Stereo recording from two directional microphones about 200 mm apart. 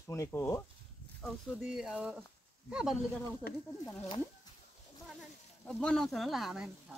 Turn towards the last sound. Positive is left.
turn(degrees=0)  # may be behind; listen again after turning